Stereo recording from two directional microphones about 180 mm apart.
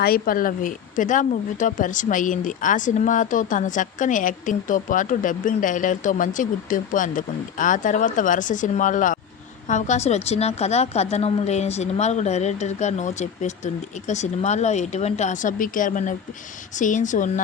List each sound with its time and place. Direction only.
0.0 s a woman's voice: 55° left (ahead or behind)